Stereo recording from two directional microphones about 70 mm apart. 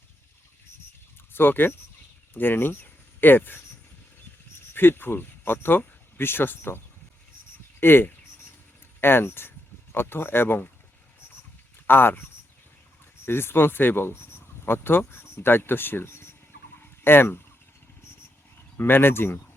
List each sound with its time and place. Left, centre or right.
1.3 s speech: left
4.7 s speech: left
11.9 s speech: left
13.2 s speech: left
16.8 s a sound: left
18.8 s speech: left